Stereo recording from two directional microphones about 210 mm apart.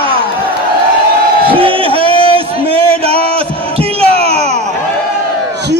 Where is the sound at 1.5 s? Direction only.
25° right (ahead or behind).